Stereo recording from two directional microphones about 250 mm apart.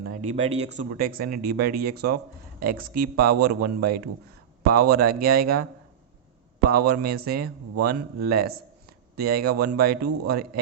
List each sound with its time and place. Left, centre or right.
0.3 s speech: right
6.7 s speech: right